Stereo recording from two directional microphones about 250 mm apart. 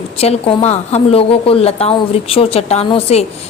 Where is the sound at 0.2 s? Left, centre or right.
Left.